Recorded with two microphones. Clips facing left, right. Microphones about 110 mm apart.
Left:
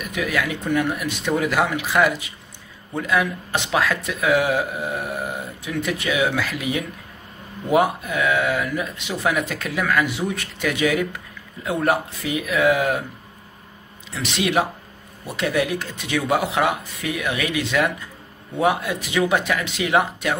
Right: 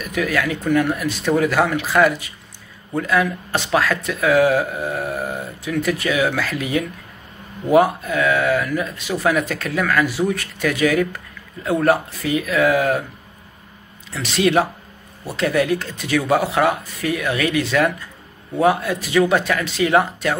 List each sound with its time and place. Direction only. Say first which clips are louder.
0.0 s speech: right 3 dB; 15° left (ahead or behind)
14.1 s speech: right 4 dB; 15° left (ahead or behind)